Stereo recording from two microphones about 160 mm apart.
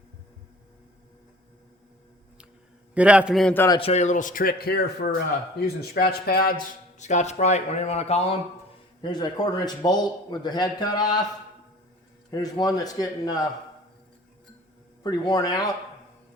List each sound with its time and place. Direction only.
2.9 s a man's voice: 10° right (ahead or behind)
3.5 s speech: 15° left (ahead or behind)
3.8 s a man's voice: 40° left (ahead or behind); by 6.7 s 65° left (ahead or behind)
7.0 s speech: 45° left (ahead or behind)
9.0 s a man's voice: 25° left (ahead or behind)
12.3 s a man's voice: 25° left (ahead or behind)
15.0 s a man's voice: 25° left (ahead or behind)